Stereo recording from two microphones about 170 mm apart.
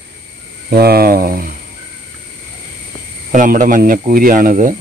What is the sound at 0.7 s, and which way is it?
Speech, 65° right (ahead or behind).